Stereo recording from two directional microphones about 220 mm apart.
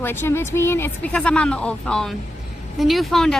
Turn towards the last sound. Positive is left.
turn(degrees=0)  # may be behind; listen again after turning